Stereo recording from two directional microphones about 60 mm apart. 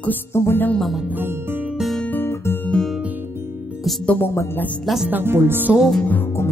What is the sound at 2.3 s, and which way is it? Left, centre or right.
Guitar, left.